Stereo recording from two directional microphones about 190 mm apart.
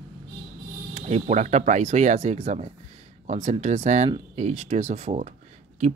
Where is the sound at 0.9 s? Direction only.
35° right (ahead or behind).